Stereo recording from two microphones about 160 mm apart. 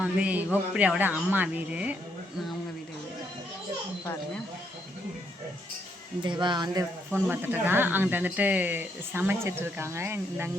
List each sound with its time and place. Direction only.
0.0 s speech: 10° right (ahead or behind)
6.2 s speech: 30° right (ahead or behind)
7.1 s speech: 10° right (ahead or behind)